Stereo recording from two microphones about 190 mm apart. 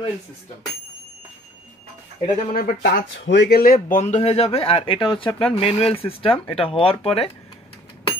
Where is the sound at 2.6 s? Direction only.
60° left (ahead or behind).